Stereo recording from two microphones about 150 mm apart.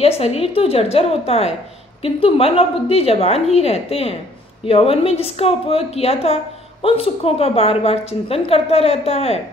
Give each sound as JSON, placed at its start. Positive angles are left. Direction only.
{"t": 0.0, "sound": "a woman's voice", "side_deg": 40}